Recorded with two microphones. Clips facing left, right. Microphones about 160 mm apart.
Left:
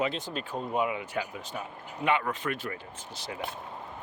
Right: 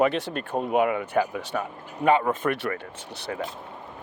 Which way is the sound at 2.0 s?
45° right (ahead or behind).